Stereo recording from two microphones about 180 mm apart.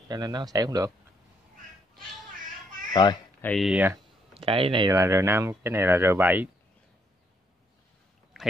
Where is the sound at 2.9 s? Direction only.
25° left (ahead or behind).